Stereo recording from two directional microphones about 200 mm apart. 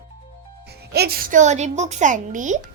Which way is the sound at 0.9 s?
50° right (ahead or behind).